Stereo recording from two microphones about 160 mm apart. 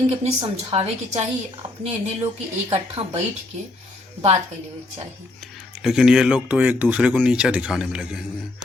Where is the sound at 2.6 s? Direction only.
40° right (ahead or behind).